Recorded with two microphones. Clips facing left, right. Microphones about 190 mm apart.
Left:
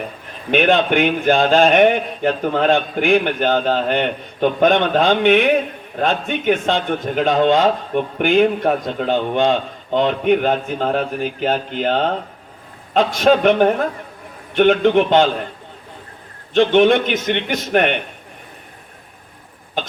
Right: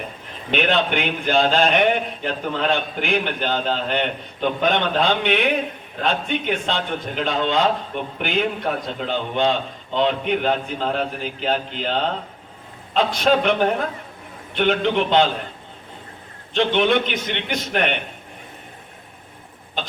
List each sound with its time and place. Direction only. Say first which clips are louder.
0.5 s a man's voice: left 5 dB; 50° left (ahead or behind)
16.6 s a man's voice: left 6 dB; 50° left (ahead or behind)